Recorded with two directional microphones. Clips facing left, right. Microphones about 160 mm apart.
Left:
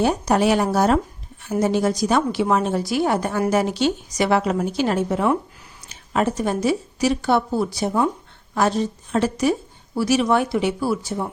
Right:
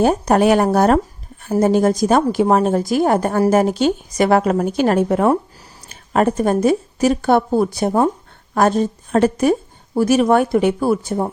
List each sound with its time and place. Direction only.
0.0 s a woman's voice: 50° right (ahead or behind)